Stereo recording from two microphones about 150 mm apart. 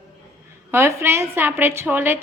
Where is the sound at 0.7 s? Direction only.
15° right (ahead or behind).